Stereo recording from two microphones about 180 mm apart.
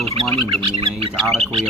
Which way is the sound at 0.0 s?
35° right (ahead or behind).